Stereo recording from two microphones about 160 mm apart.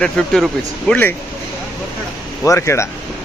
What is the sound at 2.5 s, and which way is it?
Speech, 15° left (ahead or behind).